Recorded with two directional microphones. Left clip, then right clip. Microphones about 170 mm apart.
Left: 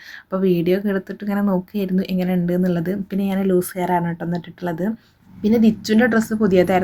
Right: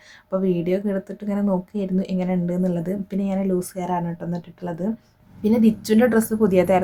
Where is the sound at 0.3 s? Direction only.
15° left (ahead or behind).